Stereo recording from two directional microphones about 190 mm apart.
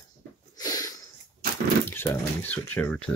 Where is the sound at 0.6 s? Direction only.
20° left (ahead or behind).